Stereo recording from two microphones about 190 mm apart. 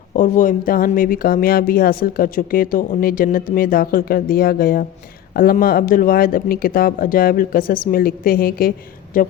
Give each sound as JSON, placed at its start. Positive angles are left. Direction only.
{"t": 0.1, "sound": "speech", "side_deg": 45}